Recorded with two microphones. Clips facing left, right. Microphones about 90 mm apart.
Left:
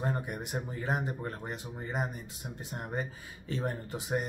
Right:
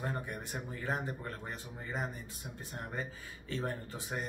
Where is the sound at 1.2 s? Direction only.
25° left (ahead or behind).